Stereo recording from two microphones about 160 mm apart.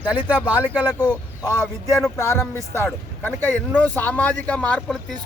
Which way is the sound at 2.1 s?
20° left (ahead or behind).